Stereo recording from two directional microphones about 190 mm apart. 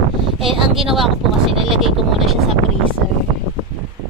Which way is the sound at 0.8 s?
Centre (ahead or behind).